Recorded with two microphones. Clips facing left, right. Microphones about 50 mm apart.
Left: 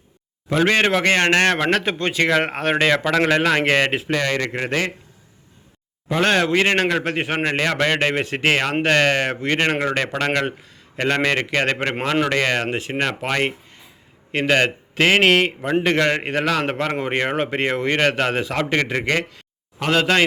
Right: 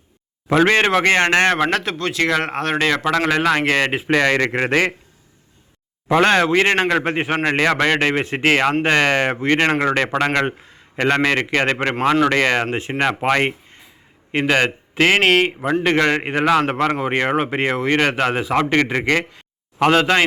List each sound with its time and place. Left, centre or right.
0.7 s speech: centre
1.8 s speech: centre
4.1 s speech: right
6.4 s speech: centre
6.7 s speech: centre